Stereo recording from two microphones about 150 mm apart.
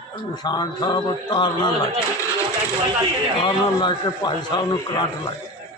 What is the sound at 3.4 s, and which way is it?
A man's voice, 30° left (ahead or behind).